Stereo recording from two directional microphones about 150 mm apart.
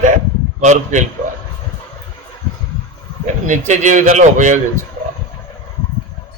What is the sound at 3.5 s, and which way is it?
A man's voice, 55° right (ahead or behind).